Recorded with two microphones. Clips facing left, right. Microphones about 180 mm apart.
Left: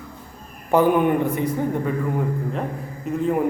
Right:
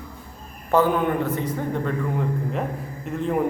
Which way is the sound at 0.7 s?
15° left (ahead or behind).